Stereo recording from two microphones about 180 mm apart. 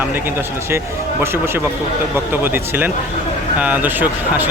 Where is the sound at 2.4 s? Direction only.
10° right (ahead or behind).